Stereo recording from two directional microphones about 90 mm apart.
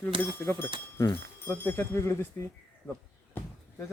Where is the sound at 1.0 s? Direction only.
40° left (ahead or behind).